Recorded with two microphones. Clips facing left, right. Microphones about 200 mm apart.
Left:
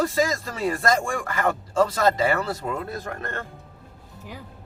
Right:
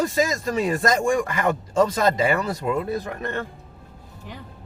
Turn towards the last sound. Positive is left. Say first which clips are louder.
# right 5 dB
turn(degrees=-15)  # may be behind; listen again after turning